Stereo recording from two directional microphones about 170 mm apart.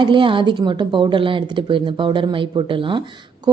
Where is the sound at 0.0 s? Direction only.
30° right (ahead or behind).